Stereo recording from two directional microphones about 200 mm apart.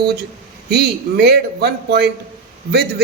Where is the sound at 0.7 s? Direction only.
55° right (ahead or behind).